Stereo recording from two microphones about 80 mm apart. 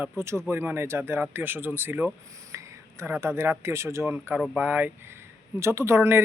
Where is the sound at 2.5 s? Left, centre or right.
Right.